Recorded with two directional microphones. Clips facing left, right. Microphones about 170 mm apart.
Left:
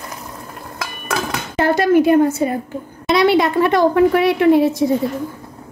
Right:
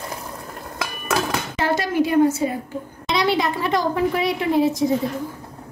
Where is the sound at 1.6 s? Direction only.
55° left (ahead or behind).